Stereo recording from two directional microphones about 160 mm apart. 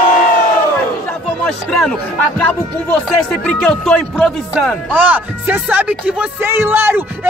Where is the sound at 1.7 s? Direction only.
5° left (ahead or behind).